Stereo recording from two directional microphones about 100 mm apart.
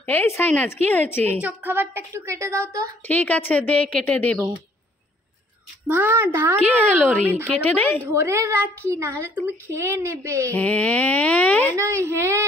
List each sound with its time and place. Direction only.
0.3 s a woman's voice: 20° left (ahead or behind)
1.4 s a woman's voice: 20° right (ahead or behind)
3.1 s a woman's voice: 15° left (ahead or behind)
5.9 s a woman's voice: 20° right (ahead or behind)
7.6 s a woman's voice: 20° left (ahead or behind)
8.1 s a woman's voice: 30° right (ahead or behind)
10.5 s a woman's voice: 15° left (ahead or behind)
11.7 s a woman's voice: 30° right (ahead or behind)